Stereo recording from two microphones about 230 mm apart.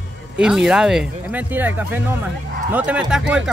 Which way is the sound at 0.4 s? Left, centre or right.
Centre.